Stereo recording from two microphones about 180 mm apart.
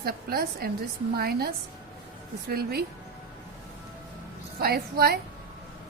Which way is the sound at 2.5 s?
60° right (ahead or behind).